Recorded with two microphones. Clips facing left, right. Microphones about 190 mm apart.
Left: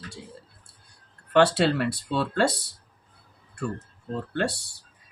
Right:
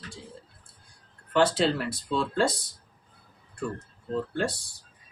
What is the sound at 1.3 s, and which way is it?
Speech, 70° left (ahead or behind).